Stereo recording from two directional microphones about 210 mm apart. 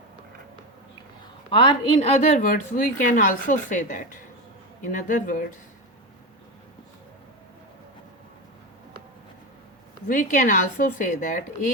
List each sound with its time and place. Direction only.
1.5 s a woman's voice: 25° left (ahead or behind)
10.1 s a woman's voice: 40° left (ahead or behind)